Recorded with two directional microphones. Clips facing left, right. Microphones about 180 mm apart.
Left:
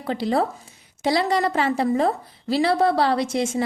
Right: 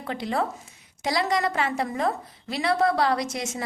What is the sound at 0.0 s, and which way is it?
A woman's voice, 35° left (ahead or behind).